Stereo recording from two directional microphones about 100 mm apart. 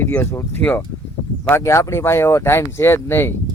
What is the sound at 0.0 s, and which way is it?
Speech, 20° left (ahead or behind).